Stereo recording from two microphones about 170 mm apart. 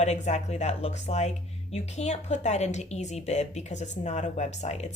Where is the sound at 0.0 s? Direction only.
40° left (ahead or behind).